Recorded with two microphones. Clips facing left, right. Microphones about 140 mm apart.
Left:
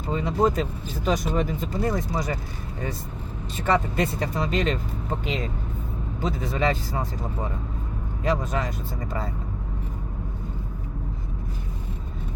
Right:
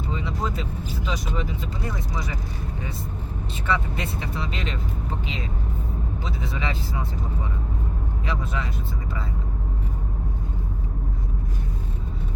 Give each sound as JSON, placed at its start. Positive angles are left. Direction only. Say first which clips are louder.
{"t": 0.1, "sound": "speech", "louder": "left 9 dB", "side_deg": 45}
{"t": 3.6, "sound": "speech", "louder": "left 5 dB", "side_deg": 45}
{"t": 6.2, "sound": "speech", "louder": "left 8 dB", "side_deg": 45}
{"t": 8.2, "sound": "speech", "louder": "left 6 dB", "side_deg": 45}